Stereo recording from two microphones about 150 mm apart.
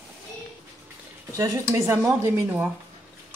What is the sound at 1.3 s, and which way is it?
Speech, 25° right (ahead or behind).